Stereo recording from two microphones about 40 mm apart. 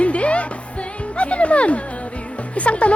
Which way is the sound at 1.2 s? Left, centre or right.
Left.